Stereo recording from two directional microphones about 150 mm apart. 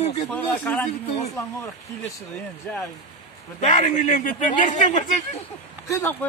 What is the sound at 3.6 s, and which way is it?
A man's voice, 55° left (ahead or behind).